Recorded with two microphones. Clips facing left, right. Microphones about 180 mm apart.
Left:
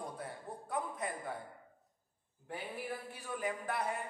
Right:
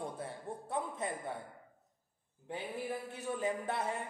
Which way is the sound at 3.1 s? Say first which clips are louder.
Right 4 dB; 25° right (ahead or behind).